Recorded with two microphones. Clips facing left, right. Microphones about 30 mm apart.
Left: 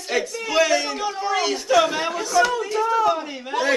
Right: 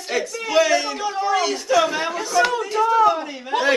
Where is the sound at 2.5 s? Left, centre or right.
Centre.